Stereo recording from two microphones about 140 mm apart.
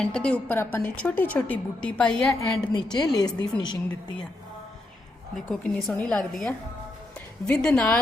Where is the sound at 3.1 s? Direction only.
30° left (ahead or behind).